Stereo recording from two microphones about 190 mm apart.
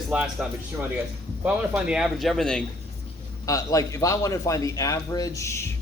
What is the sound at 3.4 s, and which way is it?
A man's voice, 15° left (ahead or behind).